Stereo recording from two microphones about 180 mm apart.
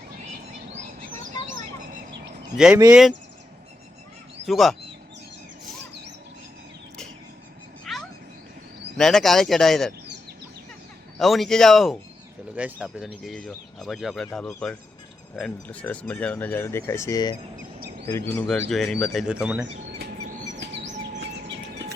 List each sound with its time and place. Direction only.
0.7 s bird: 45° right (ahead or behind)
2.9 s speech: centre (ahead or behind)
4.4 s speech: centre (ahead or behind)
7.9 s a sound: centre (ahead or behind)
9.0 s speech: centre (ahead or behind)
11.2 s speech: centre (ahead or behind)
20.6 s bird: 70° right (ahead or behind)